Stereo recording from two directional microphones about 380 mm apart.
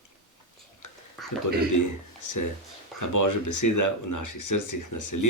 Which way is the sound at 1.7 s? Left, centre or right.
Left.